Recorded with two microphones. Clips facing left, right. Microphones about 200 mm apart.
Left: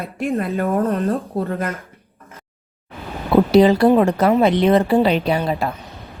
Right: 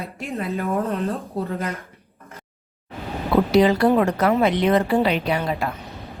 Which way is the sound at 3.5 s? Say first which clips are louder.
Left 4 dB; 30° left (ahead or behind).